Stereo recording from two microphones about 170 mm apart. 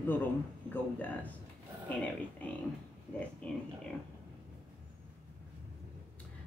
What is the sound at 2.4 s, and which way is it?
Speech, 10° left (ahead or behind).